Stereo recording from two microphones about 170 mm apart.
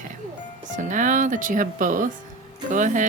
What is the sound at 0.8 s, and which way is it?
Speech, 50° right (ahead or behind).